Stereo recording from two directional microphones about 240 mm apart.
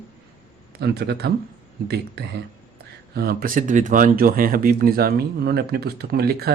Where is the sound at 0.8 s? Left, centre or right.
Right.